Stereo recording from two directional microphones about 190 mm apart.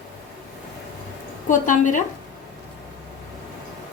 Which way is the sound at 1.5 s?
40° left (ahead or behind).